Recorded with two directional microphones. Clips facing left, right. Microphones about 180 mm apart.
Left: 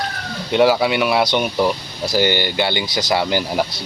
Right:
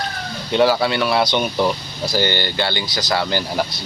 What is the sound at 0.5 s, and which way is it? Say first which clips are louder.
Speech: left 1 dB; 15° left (ahead or behind).